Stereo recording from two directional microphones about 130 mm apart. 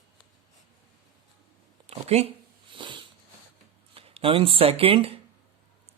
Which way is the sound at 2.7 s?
40° right (ahead or behind).